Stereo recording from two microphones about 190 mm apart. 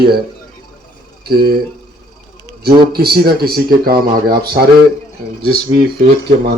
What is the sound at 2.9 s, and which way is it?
Speech, 55° right (ahead or behind).